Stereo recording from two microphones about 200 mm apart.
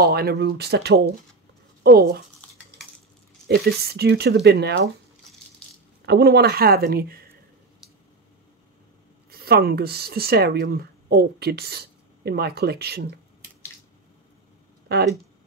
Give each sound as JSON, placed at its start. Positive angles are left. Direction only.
{"t": 0.0, "sound": "speech", "side_deg": -55}
{"t": 3.4, "sound": "speech", "side_deg": -55}
{"t": 6.0, "sound": "a woman's voice", "side_deg": -55}
{"t": 9.3, "sound": "speech", "side_deg": -50}